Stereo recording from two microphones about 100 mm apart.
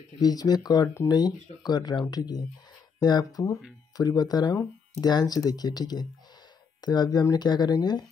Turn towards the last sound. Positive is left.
turn(degrees=45)  # may be behind; listen again after turning